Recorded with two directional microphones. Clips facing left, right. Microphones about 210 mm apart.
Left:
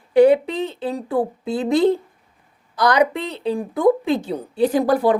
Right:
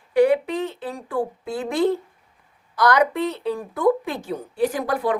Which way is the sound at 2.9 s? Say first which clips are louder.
Left 1 dB; 15° left (ahead or behind).